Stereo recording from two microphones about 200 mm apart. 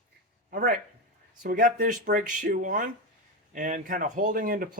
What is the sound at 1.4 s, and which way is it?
Speech, 45° right (ahead or behind).